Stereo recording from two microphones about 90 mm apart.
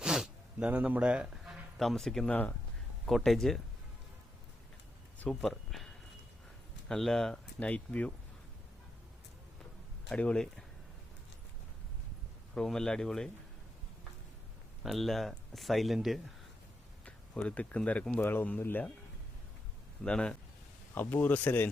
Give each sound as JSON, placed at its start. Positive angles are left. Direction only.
{"t": 0.0, "sound": "a sound", "side_deg": -5}
{"t": 0.7, "sound": "speech", "side_deg": -15}
{"t": 1.8, "sound": "speech", "side_deg": 5}
{"t": 2.3, "sound": "speech", "side_deg": 15}
{"t": 3.1, "sound": "speech", "side_deg": 0}
{"t": 5.4, "sound": "speech", "side_deg": 5}
{"t": 10.1, "sound": "speech", "side_deg": 15}
{"t": 12.5, "sound": "speech", "side_deg": 10}
{"t": 14.8, "sound": "speech", "side_deg": 0}
{"t": 17.1, "sound": "speech", "side_deg": 15}
{"t": 20.1, "sound": "speech", "side_deg": 10}
{"t": 20.9, "sound": "speech", "side_deg": 20}